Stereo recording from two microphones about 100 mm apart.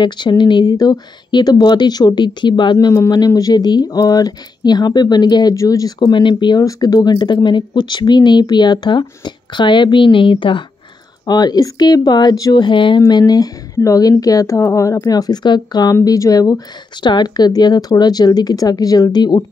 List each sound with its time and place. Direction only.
0.0 s speech: 50° left (ahead or behind)
3.3 s a woman's voice: 40° left (ahead or behind)
5.9 s speech: 50° left (ahead or behind)
6.6 s a woman's voice: 35° left (ahead or behind); by 10.6 s 55° left (ahead or behind)
11.2 s a woman's voice: 40° left (ahead or behind)
12.6 s speech: 55° left (ahead or behind)
13.3 s a woman's voice: 35° left (ahead or behind)